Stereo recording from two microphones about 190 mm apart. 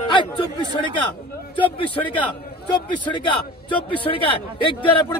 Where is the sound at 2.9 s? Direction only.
25° left (ahead or behind).